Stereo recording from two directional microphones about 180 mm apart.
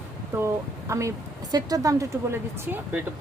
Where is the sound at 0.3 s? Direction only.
15° right (ahead or behind).